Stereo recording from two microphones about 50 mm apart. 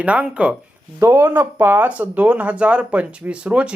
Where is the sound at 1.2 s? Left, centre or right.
Right.